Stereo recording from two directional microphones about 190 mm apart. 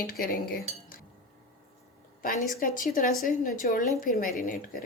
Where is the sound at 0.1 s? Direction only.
50° left (ahead or behind).